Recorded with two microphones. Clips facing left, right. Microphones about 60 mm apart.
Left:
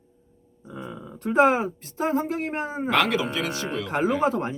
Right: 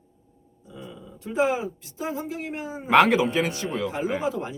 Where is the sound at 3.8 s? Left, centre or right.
Left.